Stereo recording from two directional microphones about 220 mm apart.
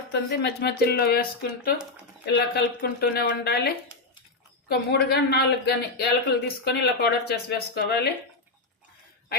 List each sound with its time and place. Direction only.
0.1 s speech: 50° left (ahead or behind)
4.7 s speech: 45° left (ahead or behind)